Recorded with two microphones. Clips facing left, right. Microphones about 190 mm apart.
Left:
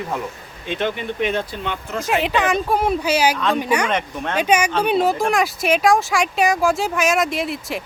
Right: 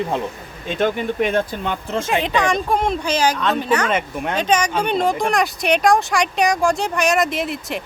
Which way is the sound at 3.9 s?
10° right (ahead or behind).